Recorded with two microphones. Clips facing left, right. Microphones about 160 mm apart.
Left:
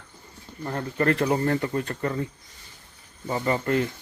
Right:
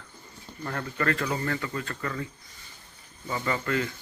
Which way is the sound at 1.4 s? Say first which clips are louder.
Left 6 dB; 40° left (ahead or behind).